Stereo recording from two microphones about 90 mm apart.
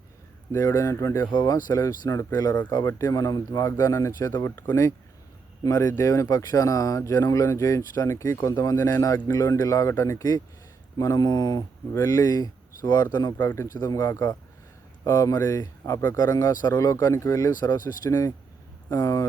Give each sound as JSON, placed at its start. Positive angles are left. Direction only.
{"t": 0.5, "sound": "speech", "side_deg": 35}
{"t": 1.3, "sound": "speech", "side_deg": 50}
{"t": 13.3, "sound": "speech", "side_deg": 30}
{"t": 13.7, "sound": "speech", "side_deg": 45}
{"t": 16.1, "sound": "speech", "side_deg": 45}
{"t": 18.1, "sound": "speech", "side_deg": 30}